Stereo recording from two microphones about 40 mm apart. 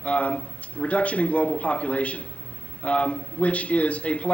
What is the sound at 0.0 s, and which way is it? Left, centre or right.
Speech, left.